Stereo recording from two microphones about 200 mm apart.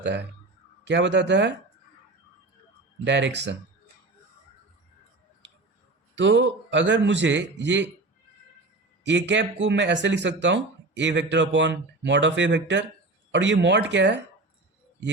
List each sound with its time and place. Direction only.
0.0 s speech: 60° right (ahead or behind)
3.0 s speech: 60° right (ahead or behind)
6.1 s speech: 65° right (ahead or behind)
9.0 s speech: 65° right (ahead or behind)